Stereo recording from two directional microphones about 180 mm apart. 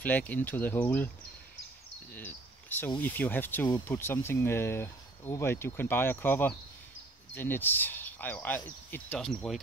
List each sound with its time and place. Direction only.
0.0 s speech: 10° left (ahead or behind)
2.1 s cricket: 10° left (ahead or behind)
3.0 s speech: 10° left (ahead or behind)
3.6 s speech: 20° left (ahead or behind); by 9.6 s 5° left (ahead or behind)